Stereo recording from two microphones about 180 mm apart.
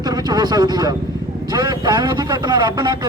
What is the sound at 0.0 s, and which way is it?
A man's voice, 20° right (ahead or behind).